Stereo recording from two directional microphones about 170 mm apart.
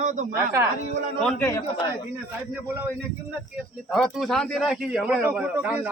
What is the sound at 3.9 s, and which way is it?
A man's voice, centre (ahead or behind).